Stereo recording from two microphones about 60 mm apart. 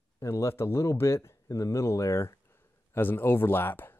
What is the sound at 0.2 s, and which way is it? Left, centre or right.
Speech, left.